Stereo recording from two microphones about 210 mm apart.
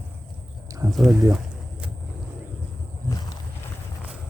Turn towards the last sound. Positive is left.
turn(degrees=20)  # may be behind; listen again after turning